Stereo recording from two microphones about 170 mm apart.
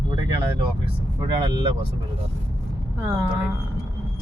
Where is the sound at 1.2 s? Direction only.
30° right (ahead or behind).